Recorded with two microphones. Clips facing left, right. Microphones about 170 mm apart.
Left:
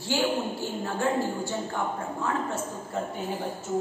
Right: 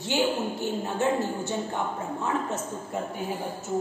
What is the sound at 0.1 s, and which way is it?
A woman's voice, 20° right (ahead or behind).